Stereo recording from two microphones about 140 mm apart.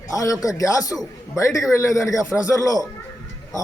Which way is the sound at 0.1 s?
25° left (ahead or behind).